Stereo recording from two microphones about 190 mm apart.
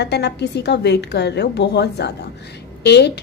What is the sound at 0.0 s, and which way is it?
Speech, 60° left (ahead or behind).